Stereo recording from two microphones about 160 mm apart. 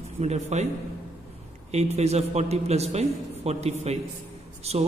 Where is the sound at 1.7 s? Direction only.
45° right (ahead or behind).